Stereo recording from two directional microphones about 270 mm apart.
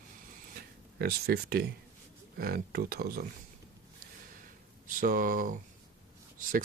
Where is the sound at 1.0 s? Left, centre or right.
Right.